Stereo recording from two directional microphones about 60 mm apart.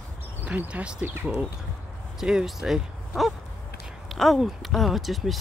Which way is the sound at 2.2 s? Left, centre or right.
Centre.